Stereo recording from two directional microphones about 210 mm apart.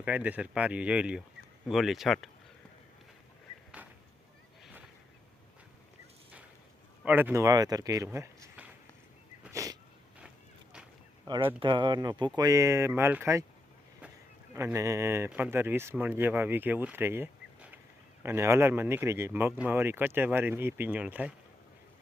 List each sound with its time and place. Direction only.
0.0 s speech: 5° right (ahead or behind)
3.8 s a sound: 5° right (ahead or behind)
7.0 s speech: 10° right (ahead or behind)
9.4 s sneeze: 15° right (ahead or behind)
10.2 s a sound: 5° right (ahead or behind)
11.3 s speech: 20° right (ahead or behind)
14.5 s speech: 15° right (ahead or behind)